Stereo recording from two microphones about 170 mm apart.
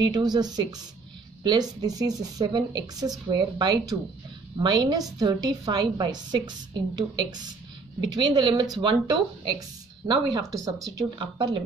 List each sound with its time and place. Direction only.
0.0 s speech: 25° right (ahead or behind)